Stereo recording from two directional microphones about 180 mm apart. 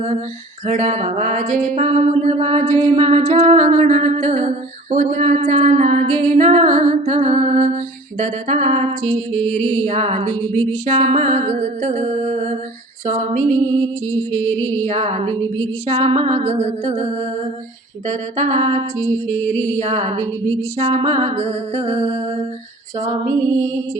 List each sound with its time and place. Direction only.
0.7 s a capella: 40° right (ahead or behind)
14.2 s music: 10° left (ahead or behind)
14.8 s a capella: 35° right (ahead or behind)
18.1 s a capella: 40° right (ahead or behind)
19.8 s a capella: 35° right (ahead or behind)